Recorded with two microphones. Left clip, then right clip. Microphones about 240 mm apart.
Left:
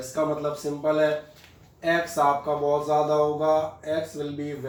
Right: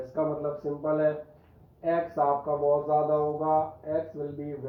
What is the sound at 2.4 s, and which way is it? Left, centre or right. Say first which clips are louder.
Speech: left 2 dB; left.